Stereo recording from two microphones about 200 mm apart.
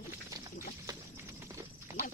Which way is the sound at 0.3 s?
15° right (ahead or behind).